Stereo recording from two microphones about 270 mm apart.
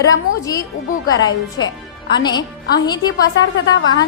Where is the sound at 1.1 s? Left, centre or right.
Left.